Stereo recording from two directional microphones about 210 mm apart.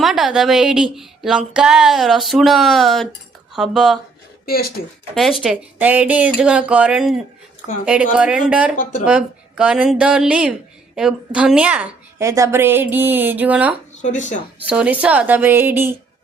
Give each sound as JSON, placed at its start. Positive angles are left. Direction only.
{"t": 0.0, "sound": "speech", "side_deg": 0}
{"t": 4.4, "sound": "speech", "side_deg": 45}
{"t": 5.1, "sound": "speech", "side_deg": 0}
{"t": 8.7, "sound": "speech", "side_deg": 40}
{"t": 9.0, "sound": "a woman's voice", "side_deg": -5}
{"t": 14.0, "sound": "speech", "side_deg": 35}
{"t": 14.6, "sound": "a woman's voice", "side_deg": -5}